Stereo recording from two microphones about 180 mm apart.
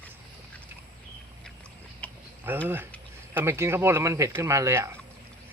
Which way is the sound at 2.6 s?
10° right (ahead or behind).